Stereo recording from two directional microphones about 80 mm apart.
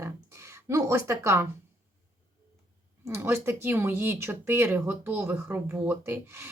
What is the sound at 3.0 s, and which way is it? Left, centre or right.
Speech, right.